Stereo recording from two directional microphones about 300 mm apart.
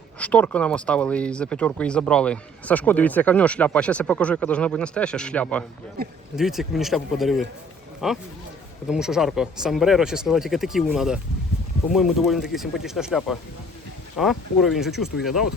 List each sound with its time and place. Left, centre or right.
0.2 s speech: centre
6.0 s speech: right
6.3 s speech: centre